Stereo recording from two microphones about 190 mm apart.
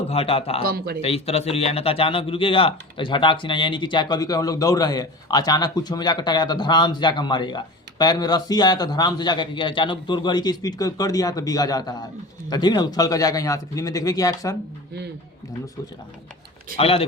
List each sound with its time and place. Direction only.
0.1 s speech: 30° left (ahead or behind)
0.6 s speech: 55° right (ahead or behind)
1.0 s a man's voice: 30° left (ahead or behind)
16.7 s speech: 30° left (ahead or behind)